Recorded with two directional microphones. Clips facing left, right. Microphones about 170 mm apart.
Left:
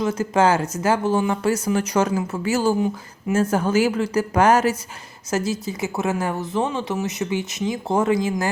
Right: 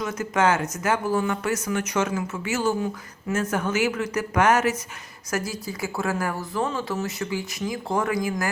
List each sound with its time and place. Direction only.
0.0 s speech: 30° left (ahead or behind)